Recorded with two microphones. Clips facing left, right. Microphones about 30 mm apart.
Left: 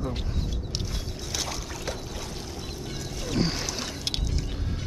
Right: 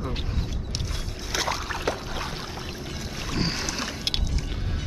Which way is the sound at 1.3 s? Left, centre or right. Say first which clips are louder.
Right 7 dB; right.